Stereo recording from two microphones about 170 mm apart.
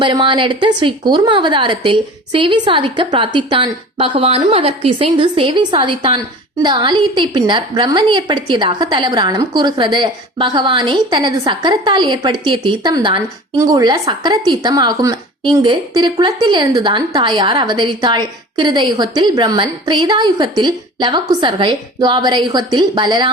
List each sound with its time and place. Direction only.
0.0 s a woman's voice: 30° right (ahead or behind)